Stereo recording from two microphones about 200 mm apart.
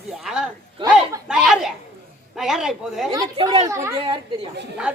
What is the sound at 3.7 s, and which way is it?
Speech, 15° right (ahead or behind).